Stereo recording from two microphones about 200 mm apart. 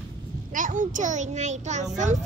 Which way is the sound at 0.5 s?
40° right (ahead or behind).